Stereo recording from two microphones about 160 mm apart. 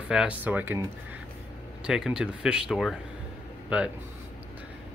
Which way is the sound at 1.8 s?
5° right (ahead or behind).